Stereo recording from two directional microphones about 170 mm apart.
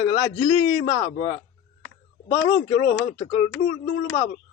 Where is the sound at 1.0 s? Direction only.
40° left (ahead or behind).